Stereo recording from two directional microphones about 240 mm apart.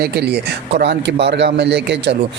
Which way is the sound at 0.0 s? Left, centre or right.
Right.